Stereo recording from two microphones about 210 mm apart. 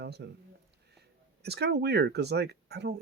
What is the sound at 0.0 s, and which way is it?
Speech, 50° right (ahead or behind).